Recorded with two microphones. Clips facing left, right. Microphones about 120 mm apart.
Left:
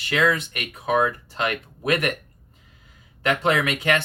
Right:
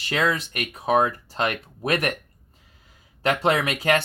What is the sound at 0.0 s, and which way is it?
Speech, 35° right (ahead or behind).